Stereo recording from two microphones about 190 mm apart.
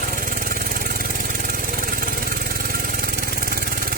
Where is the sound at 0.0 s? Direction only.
50° right (ahead or behind).